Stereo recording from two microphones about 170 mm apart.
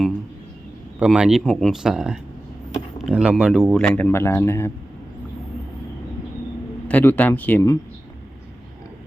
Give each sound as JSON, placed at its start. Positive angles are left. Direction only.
{"t": 0.9, "sound": "speech", "side_deg": -5}
{"t": 6.8, "sound": "a man's voice", "side_deg": 10}